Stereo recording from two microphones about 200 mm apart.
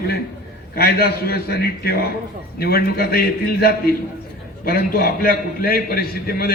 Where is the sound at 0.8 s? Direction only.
50° left (ahead or behind).